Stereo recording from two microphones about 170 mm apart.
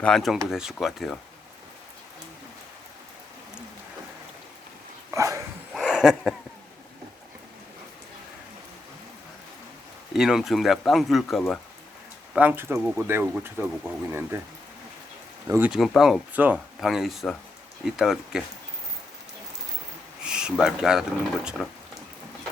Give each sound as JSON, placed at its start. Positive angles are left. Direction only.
{"t": 0.0, "sound": "speech", "side_deg": 0}
{"t": 5.1, "sound": "dog", "side_deg": -20}
{"t": 5.7, "sound": "a sound", "side_deg": -5}
{"t": 10.1, "sound": "speech", "side_deg": 0}
{"t": 12.4, "sound": "speech", "side_deg": -10}
{"t": 15.4, "sound": "speech", "side_deg": -15}
{"t": 15.7, "sound": "speech", "side_deg": 0}
{"t": 20.2, "sound": "speech", "side_deg": -5}